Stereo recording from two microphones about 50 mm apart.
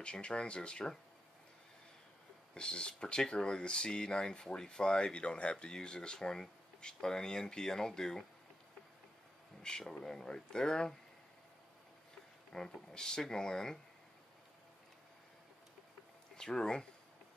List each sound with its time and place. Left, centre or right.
0.0 s speech: centre
2.5 s speech: centre
9.6 s speech: centre
12.5 s speech: centre
16.3 s speech: centre